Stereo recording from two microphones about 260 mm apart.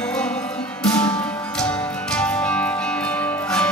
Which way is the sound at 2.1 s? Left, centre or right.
Centre.